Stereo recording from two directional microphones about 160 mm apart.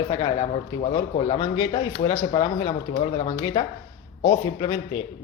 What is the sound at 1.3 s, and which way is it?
Speech, 30° left (ahead or behind).